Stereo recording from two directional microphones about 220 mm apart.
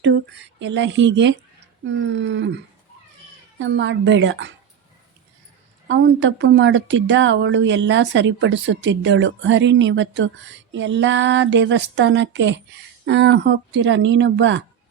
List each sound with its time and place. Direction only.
0.0 s speech: 55° right (ahead or behind)
3.6 s speech: 55° right (ahead or behind)
5.9 s speech: 55° right (ahead or behind)